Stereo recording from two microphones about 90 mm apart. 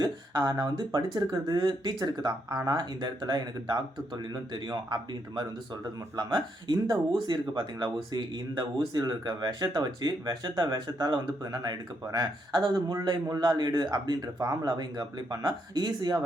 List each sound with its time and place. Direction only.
0.0 s speech: 50° right (ahead or behind)